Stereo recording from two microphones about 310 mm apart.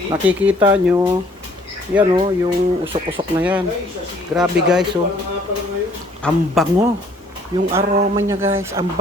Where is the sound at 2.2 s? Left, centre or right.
Centre.